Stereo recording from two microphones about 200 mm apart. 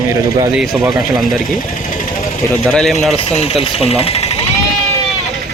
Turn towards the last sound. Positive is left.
turn(degrees=30)  # may be behind; listen again after turning